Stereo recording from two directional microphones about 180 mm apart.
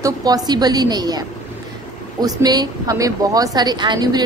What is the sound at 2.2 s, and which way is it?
A woman's voice, 20° right (ahead or behind).